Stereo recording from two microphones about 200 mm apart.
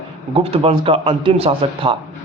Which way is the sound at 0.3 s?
30° right (ahead or behind).